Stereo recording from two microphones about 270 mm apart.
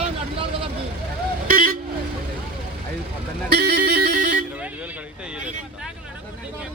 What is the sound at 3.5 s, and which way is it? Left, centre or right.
Music, right.